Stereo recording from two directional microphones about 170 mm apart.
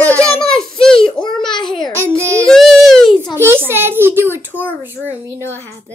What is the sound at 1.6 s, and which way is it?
Speech, centre (ahead or behind).